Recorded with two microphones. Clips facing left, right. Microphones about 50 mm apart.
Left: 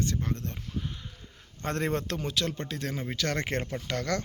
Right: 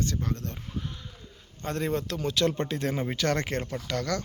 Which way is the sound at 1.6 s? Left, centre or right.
Left.